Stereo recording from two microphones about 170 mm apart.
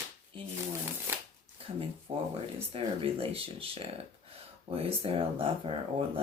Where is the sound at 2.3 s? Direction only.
35° right (ahead or behind).